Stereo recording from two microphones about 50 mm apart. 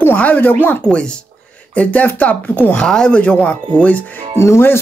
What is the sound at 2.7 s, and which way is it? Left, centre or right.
Speech, centre.